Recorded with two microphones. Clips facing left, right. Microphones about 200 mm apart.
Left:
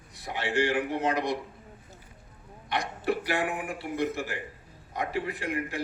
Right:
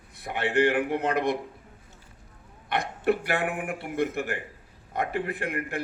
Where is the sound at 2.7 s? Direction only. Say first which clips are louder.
Right 4 dB; 55° right (ahead or behind).